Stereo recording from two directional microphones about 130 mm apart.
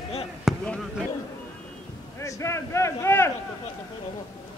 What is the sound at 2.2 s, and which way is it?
Speech, 20° left (ahead or behind).